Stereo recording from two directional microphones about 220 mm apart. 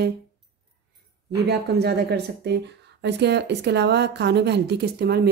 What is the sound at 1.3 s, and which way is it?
Speech, 50° right (ahead or behind).